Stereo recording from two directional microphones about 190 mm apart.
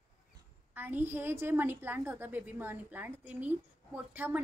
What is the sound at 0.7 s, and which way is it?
A woman's voice, 10° right (ahead or behind).